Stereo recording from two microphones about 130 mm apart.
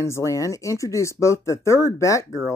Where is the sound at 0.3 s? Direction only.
25° left (ahead or behind).